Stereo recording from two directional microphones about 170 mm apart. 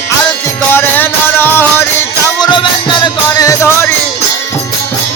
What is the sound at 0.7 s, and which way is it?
Music, 10° left (ahead or behind).